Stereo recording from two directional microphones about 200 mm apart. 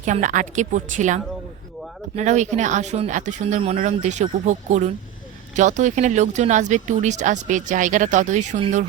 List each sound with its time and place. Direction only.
0.0 s speech: 40° right (ahead or behind)